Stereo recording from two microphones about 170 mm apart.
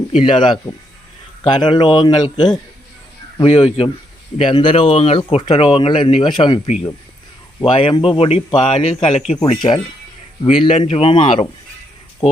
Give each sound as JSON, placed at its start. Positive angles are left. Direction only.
{"t": 0.2, "sound": "speech", "side_deg": 30}